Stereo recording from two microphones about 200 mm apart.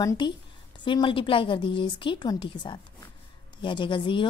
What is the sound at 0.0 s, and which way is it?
A woman's voice, 15° left (ahead or behind).